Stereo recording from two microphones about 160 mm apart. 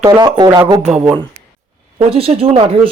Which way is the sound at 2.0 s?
35° right (ahead or behind).